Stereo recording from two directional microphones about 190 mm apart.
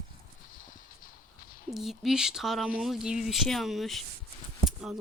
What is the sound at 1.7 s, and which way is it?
A woman's voice, centre (ahead or behind).